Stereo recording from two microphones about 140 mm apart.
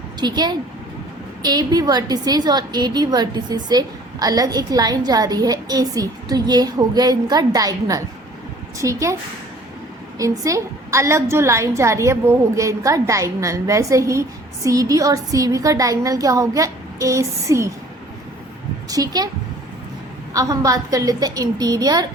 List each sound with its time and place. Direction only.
0.2 s a woman's voice: 30° right (ahead or behind)
10.2 s a woman's voice: 25° right (ahead or behind)
18.9 s a woman's voice: 25° right (ahead or behind)
20.3 s a woman's voice: 25° right (ahead or behind)